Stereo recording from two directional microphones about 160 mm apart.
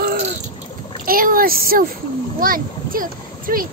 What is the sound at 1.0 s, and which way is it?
A child's voice, 65° right (ahead or behind).